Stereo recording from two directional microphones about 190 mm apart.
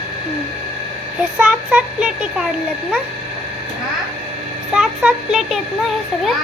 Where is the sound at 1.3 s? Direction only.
5° right (ahead or behind).